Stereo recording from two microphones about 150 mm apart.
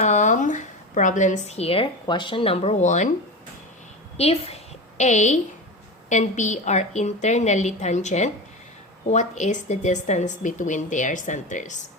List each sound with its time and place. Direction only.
0.0 s speech: 50° left (ahead or behind)
4.2 s a woman's voice: 40° left (ahead or behind)